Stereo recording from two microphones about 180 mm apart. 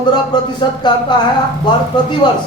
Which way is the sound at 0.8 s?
25° left (ahead or behind).